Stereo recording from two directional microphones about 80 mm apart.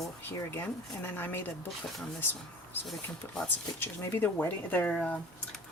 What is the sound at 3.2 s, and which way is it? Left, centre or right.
Speech, left.